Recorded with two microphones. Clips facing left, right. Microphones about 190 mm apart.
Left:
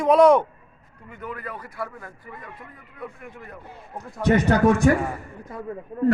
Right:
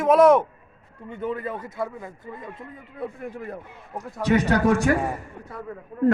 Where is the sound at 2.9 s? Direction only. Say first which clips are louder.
Right 6 dB; 35° right (ahead or behind).